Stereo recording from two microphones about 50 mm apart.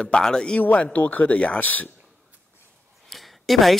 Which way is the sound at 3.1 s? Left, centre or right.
Centre.